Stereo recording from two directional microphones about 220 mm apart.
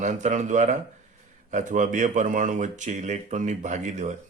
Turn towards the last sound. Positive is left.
turn(degrees=-35)  # may be behind; listen again after turning